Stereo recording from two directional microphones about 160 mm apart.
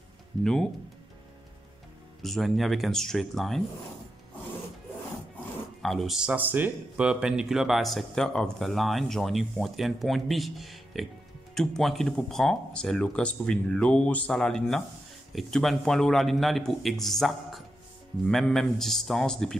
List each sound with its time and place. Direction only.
0.4 s speech: 5° left (ahead or behind)
2.2 s speech: centre (ahead or behind)
5.8 s speech: centre (ahead or behind)